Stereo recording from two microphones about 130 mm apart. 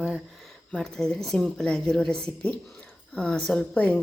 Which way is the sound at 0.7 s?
5° left (ahead or behind).